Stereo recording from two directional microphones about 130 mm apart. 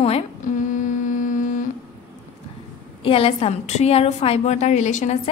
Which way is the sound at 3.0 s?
45° left (ahead or behind).